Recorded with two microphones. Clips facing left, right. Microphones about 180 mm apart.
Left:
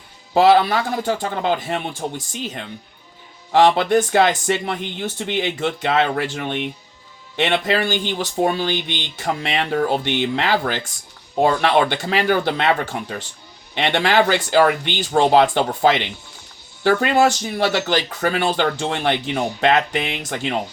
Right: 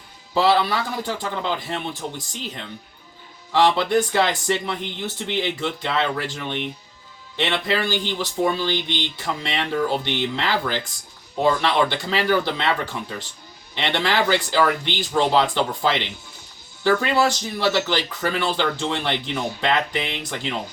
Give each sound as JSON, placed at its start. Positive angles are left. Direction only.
{"t": 0.3, "sound": "speech", "side_deg": 55}
{"t": 3.5, "sound": "speech", "side_deg": 55}